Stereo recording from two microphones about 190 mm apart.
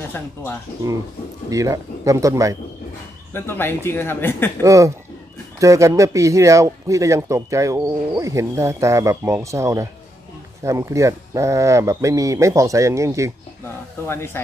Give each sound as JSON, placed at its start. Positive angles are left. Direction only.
{"t": 1.5, "sound": "speech", "side_deg": -15}
{"t": 3.3, "sound": "speech", "side_deg": 10}
{"t": 4.6, "sound": "speech", "side_deg": -15}
{"t": 14.0, "sound": "speech", "side_deg": 10}